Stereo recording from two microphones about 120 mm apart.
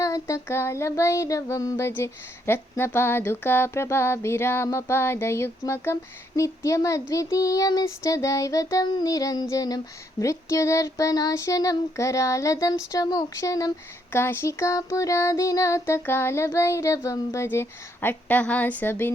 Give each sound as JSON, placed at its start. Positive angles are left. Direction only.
{"t": 0.0, "sound": "child singing", "side_deg": 25}